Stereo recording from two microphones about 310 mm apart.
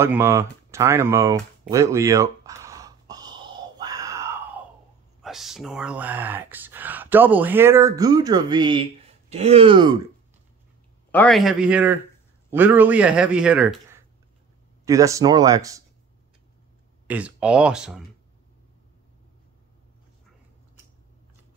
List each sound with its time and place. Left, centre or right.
0.0 s a sound: centre
5.2 s speech: centre
11.1 s speech: centre
17.1 s speech: centre